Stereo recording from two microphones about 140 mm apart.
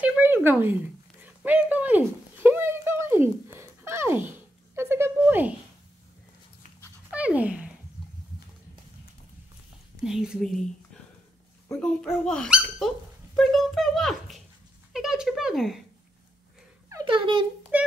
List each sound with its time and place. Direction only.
0.0 s a sound: 15° right (ahead or behind)
1.2 s speech: 10° right (ahead or behind)
3.5 s a sound: 20° right (ahead or behind)
7.1 s speech: 10° right (ahead or behind)
10.0 s a child's voice: 5° right (ahead or behind)
11.7 s a child's voice: 5° left (ahead or behind)
14.9 s a sound: 5° right (ahead or behind)
17.0 s a child's voice: 35° right (ahead or behind)
17.7 s speech: 10° right (ahead or behind)